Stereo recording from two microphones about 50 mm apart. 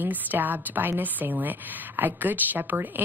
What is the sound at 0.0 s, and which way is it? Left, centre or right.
A woman's voice, right.